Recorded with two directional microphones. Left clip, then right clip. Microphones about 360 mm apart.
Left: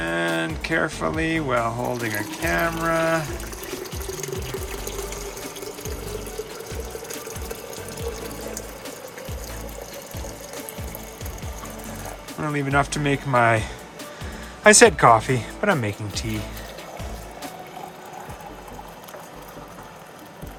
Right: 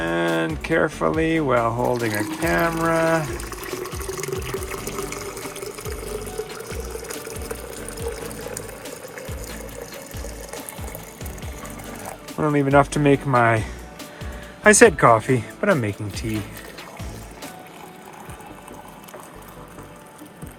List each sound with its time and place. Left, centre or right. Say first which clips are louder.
0.0 s speech: right 2 dB; centre
4.9 s water: right 2 dB; centre
12.4 s speech: right 5 dB; centre